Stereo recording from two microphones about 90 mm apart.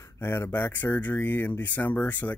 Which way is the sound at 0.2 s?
25° left (ahead or behind).